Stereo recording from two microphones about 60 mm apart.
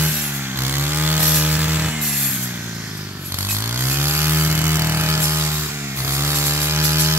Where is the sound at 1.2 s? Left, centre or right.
Right.